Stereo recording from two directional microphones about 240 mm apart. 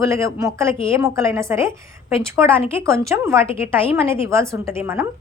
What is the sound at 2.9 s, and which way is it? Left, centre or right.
A woman's voice, centre.